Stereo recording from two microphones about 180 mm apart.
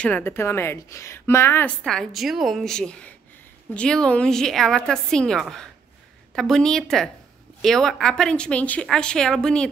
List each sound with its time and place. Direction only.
0.0 s a woman's voice: 10° left (ahead or behind)